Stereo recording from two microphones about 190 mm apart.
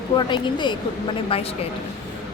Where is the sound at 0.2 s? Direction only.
25° left (ahead or behind).